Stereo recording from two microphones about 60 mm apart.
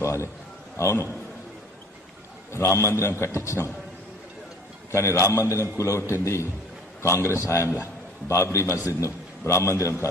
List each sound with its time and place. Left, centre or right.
0.0 s a man's voice: left
2.5 s a man's voice: left
4.9 s a man's voice: left